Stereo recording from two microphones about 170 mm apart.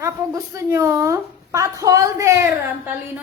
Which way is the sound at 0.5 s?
20° right (ahead or behind).